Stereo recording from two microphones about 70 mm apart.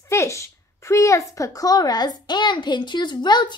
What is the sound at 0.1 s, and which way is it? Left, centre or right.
A woman's voice, left.